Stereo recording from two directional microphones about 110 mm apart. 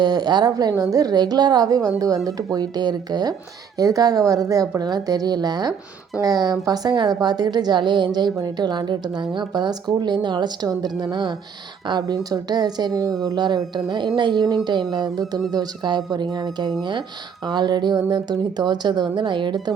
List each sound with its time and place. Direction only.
0.0 s a woman's voice: 40° right (ahead or behind)